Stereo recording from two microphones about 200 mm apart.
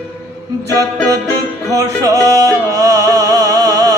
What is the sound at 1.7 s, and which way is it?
Music, 15° right (ahead or behind).